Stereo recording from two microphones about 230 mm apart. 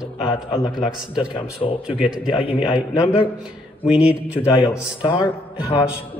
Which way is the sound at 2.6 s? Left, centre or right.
Centre.